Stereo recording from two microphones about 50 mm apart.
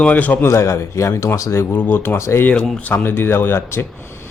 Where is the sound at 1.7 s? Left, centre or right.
Left.